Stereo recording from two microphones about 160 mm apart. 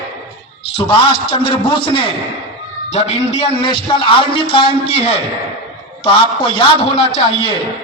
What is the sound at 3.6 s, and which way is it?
A man's voice, 30° left (ahead or behind).